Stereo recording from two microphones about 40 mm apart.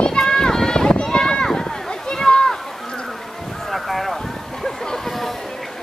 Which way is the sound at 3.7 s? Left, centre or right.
Centre.